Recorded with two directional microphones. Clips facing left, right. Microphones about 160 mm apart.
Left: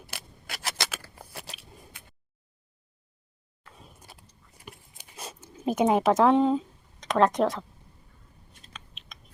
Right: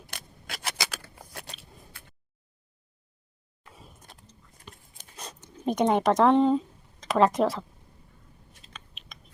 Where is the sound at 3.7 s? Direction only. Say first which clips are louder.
Even; centre (ahead or behind).